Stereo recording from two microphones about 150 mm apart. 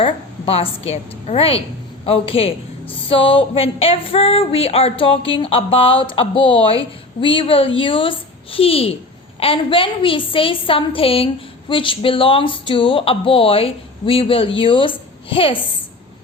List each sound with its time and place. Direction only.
0.0 s a woman's voice: 40° left (ahead or behind)